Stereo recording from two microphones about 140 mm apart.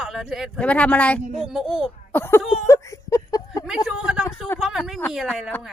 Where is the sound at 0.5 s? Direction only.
10° left (ahead or behind).